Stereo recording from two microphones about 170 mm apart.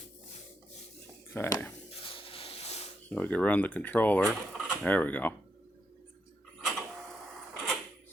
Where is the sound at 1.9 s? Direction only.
30° left (ahead or behind).